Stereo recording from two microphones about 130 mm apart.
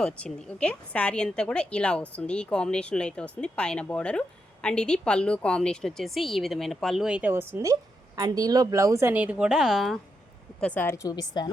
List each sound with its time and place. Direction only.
0.0 s a woman's voice: 5° left (ahead or behind)
10.6 s a woman's voice: 10° left (ahead or behind); by 11.5 s 30° left (ahead or behind)